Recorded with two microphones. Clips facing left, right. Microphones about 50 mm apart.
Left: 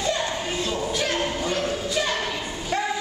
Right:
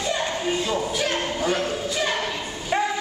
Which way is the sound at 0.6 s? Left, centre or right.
Centre.